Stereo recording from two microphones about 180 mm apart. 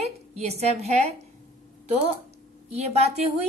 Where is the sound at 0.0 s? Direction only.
35° right (ahead or behind).